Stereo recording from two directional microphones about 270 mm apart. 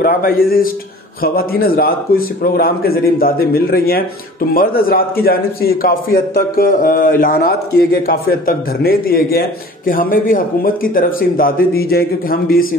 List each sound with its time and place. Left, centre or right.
0.0 s speech: left